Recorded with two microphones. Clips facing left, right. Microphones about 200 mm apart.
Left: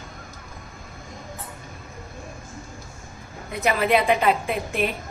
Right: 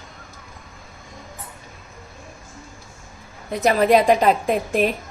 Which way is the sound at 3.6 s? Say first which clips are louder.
Right 5 dB; 40° right (ahead or behind).